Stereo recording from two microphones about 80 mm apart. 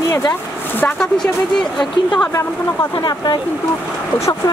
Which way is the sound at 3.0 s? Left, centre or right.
Left.